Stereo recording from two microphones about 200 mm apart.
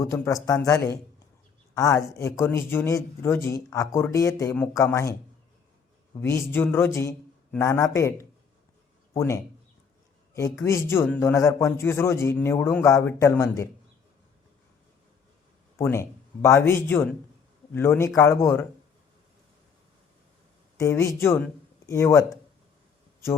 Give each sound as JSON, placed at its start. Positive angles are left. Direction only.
{"t": 0.0, "sound": "a man's voice", "side_deg": 15}
{"t": 6.1, "sound": "a man's voice", "side_deg": 10}
{"t": 10.6, "sound": "a man's voice", "side_deg": 15}
{"t": 15.8, "sound": "a man's voice", "side_deg": 15}
{"t": 20.7, "sound": "speech", "side_deg": 15}